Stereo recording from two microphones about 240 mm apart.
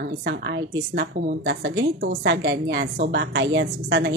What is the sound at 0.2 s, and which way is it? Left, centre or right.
A woman's voice, right.